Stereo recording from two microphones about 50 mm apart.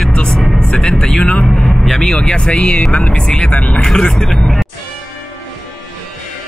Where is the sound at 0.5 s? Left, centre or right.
Centre.